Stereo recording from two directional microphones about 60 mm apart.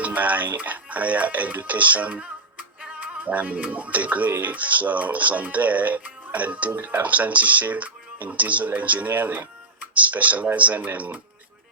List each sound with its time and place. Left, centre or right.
0.0 s speech: right
2.8 s music: right
4.4 s speech: right